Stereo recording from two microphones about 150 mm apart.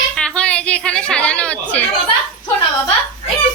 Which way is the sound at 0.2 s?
5° left (ahead or behind).